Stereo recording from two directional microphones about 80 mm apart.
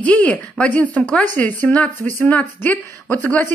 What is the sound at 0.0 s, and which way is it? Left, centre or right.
Speech, centre.